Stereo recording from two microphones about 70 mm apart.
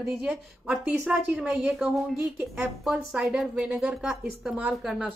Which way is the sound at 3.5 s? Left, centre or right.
Centre.